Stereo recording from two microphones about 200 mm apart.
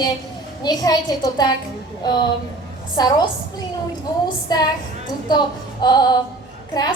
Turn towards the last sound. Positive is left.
turn(degrees=20)  # may be behind; listen again after turning